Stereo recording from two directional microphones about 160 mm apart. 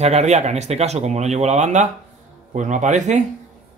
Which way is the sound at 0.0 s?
45° right (ahead or behind).